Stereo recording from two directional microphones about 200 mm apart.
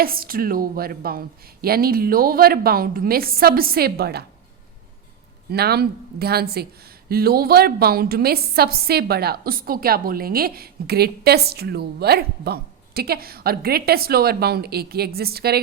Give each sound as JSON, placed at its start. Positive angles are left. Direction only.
{"t": 0.0, "sound": "speech", "side_deg": -45}
{"t": 5.5, "sound": "speech", "side_deg": -50}